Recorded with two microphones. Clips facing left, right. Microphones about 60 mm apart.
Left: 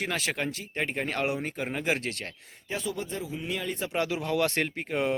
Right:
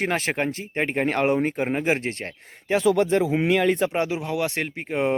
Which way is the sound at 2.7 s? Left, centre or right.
Right.